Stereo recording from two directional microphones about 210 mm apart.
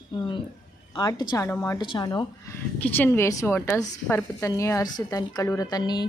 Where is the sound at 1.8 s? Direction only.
20° left (ahead or behind).